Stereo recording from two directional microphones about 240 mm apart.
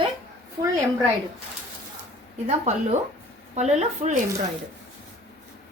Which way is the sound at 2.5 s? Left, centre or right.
Right.